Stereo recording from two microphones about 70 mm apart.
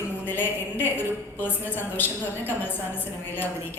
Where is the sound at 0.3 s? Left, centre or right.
Left.